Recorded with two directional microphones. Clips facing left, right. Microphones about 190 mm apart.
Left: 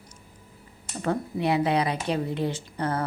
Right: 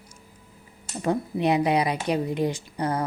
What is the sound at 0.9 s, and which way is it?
Speech, 15° right (ahead or behind).